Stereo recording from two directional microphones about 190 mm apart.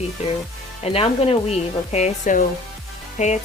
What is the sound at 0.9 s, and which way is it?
Speech, 30° left (ahead or behind).